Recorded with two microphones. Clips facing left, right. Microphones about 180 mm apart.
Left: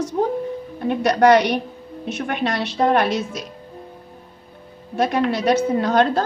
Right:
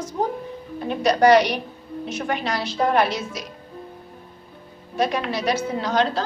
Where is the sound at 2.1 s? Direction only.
60° left (ahead or behind).